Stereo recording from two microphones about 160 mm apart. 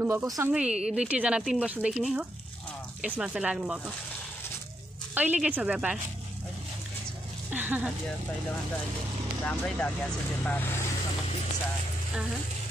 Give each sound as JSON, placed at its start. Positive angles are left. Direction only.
{"t": 0.0, "sound": "a woman's voice", "side_deg": -15}
{"t": 0.5, "sound": "speech", "side_deg": -5}
{"t": 5.1, "sound": "speech", "side_deg": -10}
{"t": 7.5, "sound": "speech", "side_deg": -10}
{"t": 9.4, "sound": "speech", "side_deg": 5}